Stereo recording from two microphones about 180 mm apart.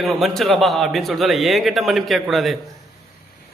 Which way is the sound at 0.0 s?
Centre (ahead or behind).